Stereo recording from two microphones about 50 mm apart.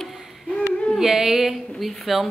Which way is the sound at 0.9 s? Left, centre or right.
Centre.